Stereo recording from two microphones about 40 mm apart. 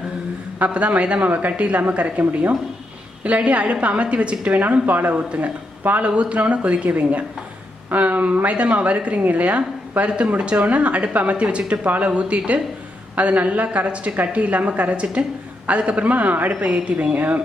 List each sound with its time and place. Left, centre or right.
0.6 s a woman's voice: right
3.3 s a woman's voice: right
4.8 s speech: right
5.1 s a woman's voice: right